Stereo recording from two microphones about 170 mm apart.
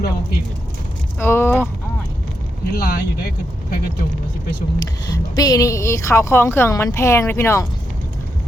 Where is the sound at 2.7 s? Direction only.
65° left (ahead or behind).